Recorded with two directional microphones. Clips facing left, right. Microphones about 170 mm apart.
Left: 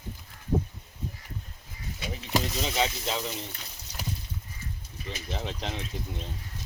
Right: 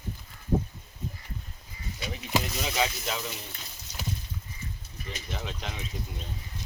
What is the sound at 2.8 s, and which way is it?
Speech, 30° left (ahead or behind).